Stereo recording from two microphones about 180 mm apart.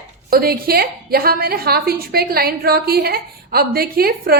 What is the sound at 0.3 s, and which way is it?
A woman's voice, 55° right (ahead or behind).